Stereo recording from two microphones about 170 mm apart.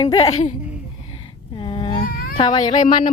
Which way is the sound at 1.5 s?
30° left (ahead or behind).